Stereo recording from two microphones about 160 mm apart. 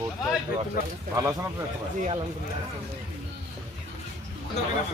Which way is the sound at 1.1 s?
15° right (ahead or behind).